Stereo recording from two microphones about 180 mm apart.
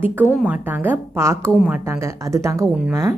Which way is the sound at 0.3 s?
5° right (ahead or behind).